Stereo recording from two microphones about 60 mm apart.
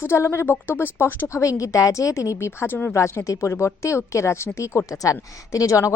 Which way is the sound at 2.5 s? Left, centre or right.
Left.